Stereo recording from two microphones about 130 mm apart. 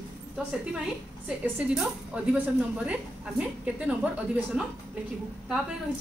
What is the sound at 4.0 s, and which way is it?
Speech, 10° right (ahead or behind).